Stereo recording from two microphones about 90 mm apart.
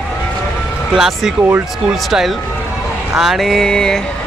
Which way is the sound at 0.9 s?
5° right (ahead or behind).